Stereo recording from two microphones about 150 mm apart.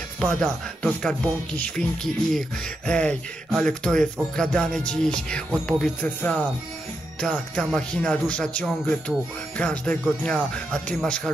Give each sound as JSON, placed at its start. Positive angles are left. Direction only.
{"t": 0.2, "sound": "music", "side_deg": 5}
{"t": 5.7, "sound": "speech", "side_deg": 5}